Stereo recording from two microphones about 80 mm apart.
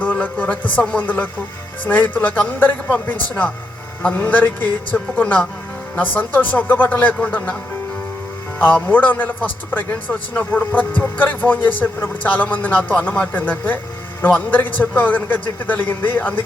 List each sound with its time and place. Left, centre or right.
0.0 s a man's voice: centre
8.5 s a man's voice: left